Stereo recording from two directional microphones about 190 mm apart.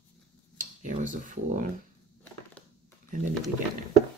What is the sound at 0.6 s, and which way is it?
Speech, 40° right (ahead or behind).